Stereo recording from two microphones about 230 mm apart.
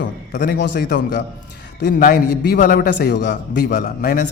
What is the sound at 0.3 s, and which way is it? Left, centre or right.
A man's voice, left.